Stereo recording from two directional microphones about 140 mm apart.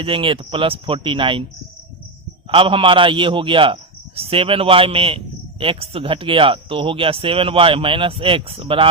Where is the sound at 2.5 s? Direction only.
40° right (ahead or behind).